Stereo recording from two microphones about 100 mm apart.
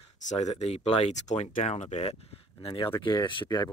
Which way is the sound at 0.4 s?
90° left.